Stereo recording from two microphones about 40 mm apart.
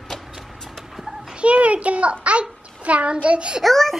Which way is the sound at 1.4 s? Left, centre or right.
Right.